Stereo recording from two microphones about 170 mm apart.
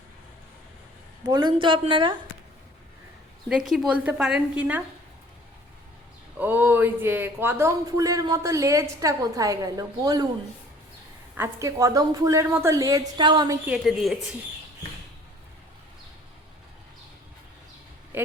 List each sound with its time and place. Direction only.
1.2 s speech: 25° right (ahead or behind)
3.5 s a woman's voice: 5° right (ahead or behind)
6.4 s speech: 10° right (ahead or behind)
11.3 s speech: 20° right (ahead or behind)
13.7 s a woman's voice: centre (ahead or behind)